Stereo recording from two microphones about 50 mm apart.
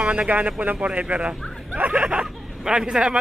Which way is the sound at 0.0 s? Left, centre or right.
Right.